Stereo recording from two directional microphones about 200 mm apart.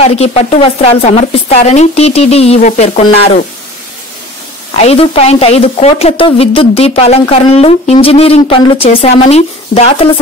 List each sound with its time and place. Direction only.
0.0 s speech: 30° left (ahead or behind)
4.8 s a woman's voice: 30° left (ahead or behind)